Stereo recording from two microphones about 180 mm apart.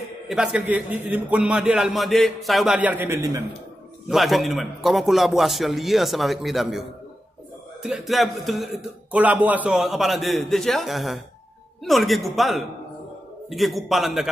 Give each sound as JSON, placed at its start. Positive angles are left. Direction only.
{"t": 0.0, "sound": "speech", "side_deg": 0}
{"t": 3.2, "sound": "a man's voice", "side_deg": -20}
{"t": 4.1, "sound": "speech", "side_deg": 0}